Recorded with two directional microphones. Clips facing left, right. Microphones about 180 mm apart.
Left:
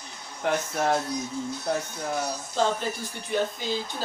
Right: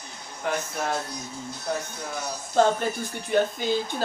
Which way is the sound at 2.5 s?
55° right (ahead or behind).